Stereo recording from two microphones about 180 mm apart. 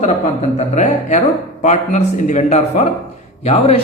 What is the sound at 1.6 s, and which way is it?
A man's voice, 45° left (ahead or behind).